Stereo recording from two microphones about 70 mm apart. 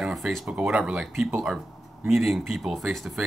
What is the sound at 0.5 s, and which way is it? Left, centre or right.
Speech, centre.